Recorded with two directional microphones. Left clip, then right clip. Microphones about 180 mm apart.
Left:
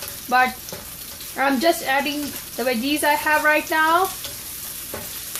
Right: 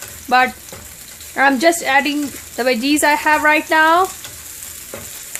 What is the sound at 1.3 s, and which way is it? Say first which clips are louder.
Speech: right 6 dB; 70° right (ahead or behind).